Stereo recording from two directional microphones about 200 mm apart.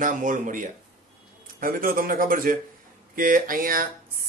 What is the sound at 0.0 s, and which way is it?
Speech, 40° right (ahead or behind).